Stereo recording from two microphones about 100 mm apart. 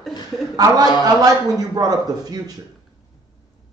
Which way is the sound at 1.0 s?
40° right (ahead or behind).